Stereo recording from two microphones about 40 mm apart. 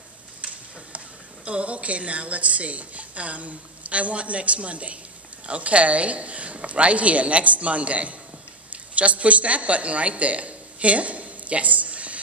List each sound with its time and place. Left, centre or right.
0.4 s a woman's voice: right